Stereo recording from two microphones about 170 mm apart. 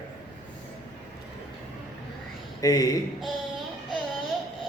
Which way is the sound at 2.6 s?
20° left (ahead or behind).